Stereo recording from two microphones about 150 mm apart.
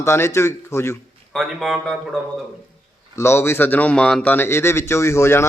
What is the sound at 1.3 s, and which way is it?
Speech, centre (ahead or behind).